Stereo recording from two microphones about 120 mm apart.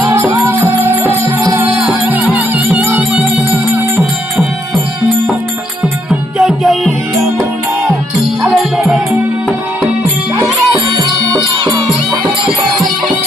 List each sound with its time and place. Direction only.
0.0 s music: 20° right (ahead or behind)
2.3 s music: 15° right (ahead or behind)
6.1 s music: 5° right (ahead or behind)
8.4 s music: 5° right (ahead or behind)
11.3 s music: 40° right (ahead or behind)